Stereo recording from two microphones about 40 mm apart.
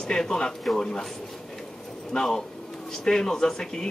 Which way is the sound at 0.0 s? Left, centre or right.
Centre.